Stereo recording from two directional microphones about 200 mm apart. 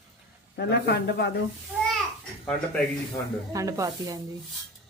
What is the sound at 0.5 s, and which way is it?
Speech, 55° left (ahead or behind).